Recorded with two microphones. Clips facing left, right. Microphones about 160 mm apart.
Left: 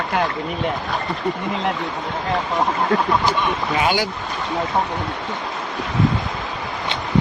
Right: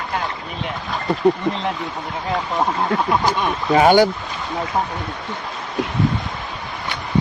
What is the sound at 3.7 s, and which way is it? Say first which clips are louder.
Speech: right 10 dB; 50° right (ahead or behind).